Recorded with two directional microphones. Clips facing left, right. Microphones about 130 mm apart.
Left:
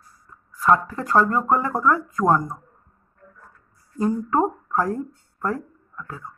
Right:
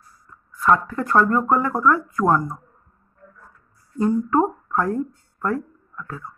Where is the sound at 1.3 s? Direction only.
15° left (ahead or behind).